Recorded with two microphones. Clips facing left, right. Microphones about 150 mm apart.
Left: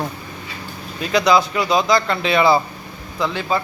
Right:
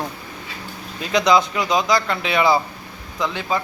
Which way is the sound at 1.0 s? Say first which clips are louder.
Left 1 dB; 20° right (ahead or behind).